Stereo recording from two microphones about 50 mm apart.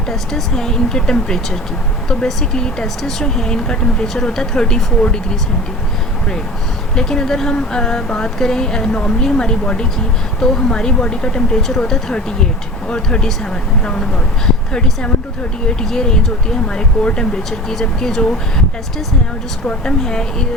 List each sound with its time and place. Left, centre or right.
0.1 s speech: centre
6.9 s speech: centre
19.8 s speech: centre